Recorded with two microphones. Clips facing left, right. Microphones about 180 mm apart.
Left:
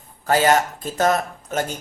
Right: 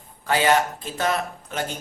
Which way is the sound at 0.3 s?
45° left (ahead or behind).